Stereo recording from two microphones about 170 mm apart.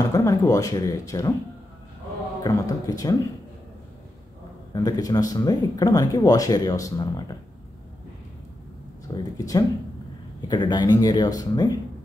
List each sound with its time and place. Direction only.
0.1 s speech: 20° left (ahead or behind)
2.4 s speech: 20° left (ahead or behind)
4.7 s speech: 20° left (ahead or behind)
9.0 s speech: 20° left (ahead or behind)